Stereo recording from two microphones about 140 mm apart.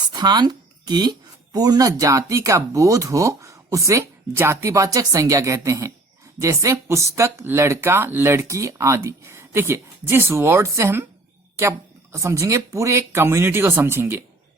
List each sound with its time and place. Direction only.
0.1 s a sound: 30° right (ahead or behind)
1.5 s speech: 25° right (ahead or behind)
12.1 s speech: 20° right (ahead or behind)